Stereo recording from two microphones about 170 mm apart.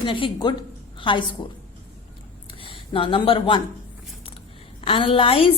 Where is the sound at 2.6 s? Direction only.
30° left (ahead or behind).